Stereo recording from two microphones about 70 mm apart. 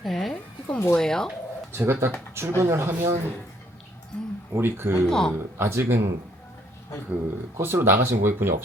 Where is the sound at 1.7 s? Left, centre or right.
Right.